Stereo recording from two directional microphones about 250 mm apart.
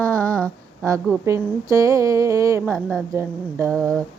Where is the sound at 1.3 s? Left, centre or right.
Centre.